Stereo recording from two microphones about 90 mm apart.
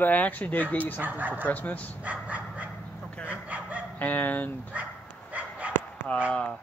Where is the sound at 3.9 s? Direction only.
20° left (ahead or behind).